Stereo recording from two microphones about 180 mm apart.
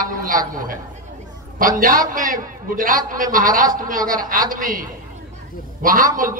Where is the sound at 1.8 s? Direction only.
50° right (ahead or behind).